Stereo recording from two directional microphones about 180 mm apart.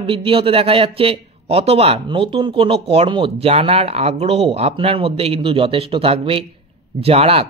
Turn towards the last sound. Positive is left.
turn(degrees=-35)  # may be behind; listen again after turning